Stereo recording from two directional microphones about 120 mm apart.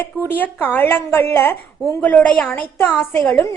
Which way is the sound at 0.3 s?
15° left (ahead or behind).